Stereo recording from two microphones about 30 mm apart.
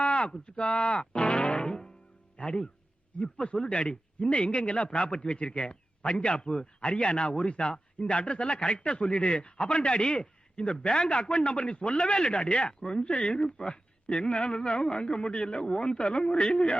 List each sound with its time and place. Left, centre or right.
0.0 s a sound: left
0.5 s a man's voice: left
1.5 s music: left
2.4 s a man's voice: left